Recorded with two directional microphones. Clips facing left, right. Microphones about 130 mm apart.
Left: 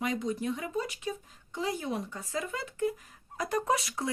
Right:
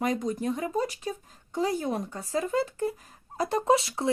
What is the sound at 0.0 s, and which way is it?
Speech, 40° right (ahead or behind).